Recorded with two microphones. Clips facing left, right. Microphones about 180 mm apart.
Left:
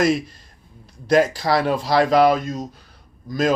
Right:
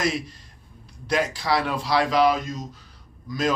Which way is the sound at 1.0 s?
45° left (ahead or behind).